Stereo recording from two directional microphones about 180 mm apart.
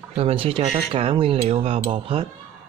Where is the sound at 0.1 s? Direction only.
35° right (ahead or behind).